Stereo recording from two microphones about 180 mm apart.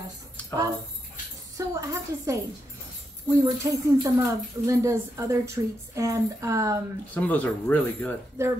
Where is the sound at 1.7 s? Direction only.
15° right (ahead or behind).